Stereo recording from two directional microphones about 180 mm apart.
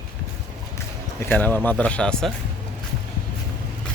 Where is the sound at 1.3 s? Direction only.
10° left (ahead or behind).